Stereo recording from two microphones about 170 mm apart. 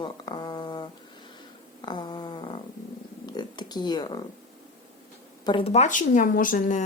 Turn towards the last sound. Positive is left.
turn(degrees=50)  # may be behind; listen again after turning